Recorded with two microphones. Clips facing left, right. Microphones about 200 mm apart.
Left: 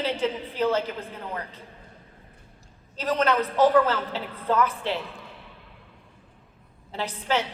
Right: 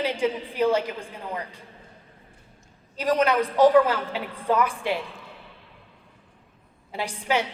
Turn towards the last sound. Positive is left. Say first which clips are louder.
# right 1 dB
turn(degrees=-10)  # may be behind; listen again after turning